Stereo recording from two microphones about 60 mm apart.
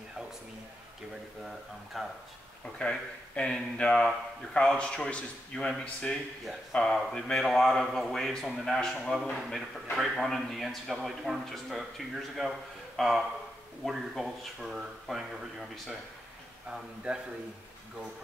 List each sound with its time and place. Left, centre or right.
2.0 s a man's voice: centre
2.8 s a man's voice: centre